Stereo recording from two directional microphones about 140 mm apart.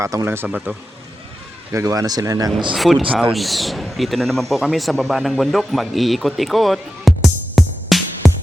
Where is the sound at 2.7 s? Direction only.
Centre (ahead or behind).